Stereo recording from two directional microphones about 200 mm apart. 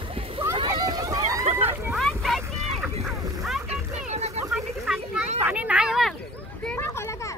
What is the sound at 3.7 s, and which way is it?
Music, 35° right (ahead or behind).